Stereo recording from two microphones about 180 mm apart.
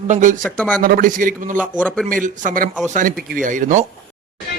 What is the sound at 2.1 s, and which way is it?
A man's voice, 45° right (ahead or behind).